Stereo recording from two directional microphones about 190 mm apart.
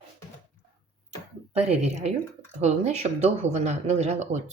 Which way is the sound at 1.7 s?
35° right (ahead or behind).